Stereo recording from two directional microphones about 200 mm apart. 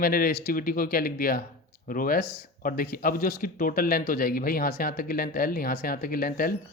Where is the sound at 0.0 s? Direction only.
45° left (ahead or behind).